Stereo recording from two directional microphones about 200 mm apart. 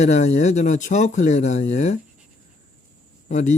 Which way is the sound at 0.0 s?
35° left (ahead or behind).